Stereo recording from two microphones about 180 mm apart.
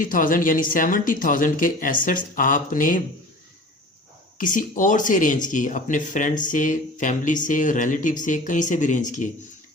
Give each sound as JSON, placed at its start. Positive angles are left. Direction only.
{"t": 0.0, "sound": "speech", "side_deg": 50}
{"t": 4.4, "sound": "speech", "side_deg": 45}